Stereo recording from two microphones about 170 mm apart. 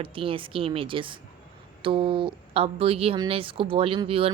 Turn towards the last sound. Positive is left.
turn(degrees=-30)  # may be behind; listen again after turning